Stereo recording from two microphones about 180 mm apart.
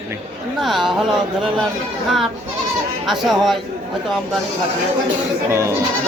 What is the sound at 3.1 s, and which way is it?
Speech, centre (ahead or behind).